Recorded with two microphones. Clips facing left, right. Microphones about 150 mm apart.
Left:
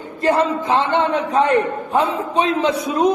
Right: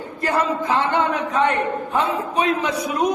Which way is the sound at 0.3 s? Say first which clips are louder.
Left 4 dB; 25° left (ahead or behind).